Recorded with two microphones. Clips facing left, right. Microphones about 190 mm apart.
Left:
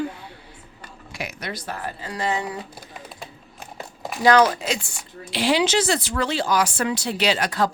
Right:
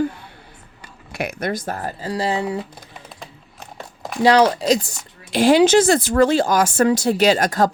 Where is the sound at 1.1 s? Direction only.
55° right (ahead or behind); by 2.6 s 30° right (ahead or behind).